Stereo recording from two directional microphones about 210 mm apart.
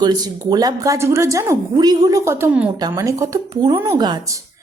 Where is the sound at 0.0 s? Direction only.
20° right (ahead or behind).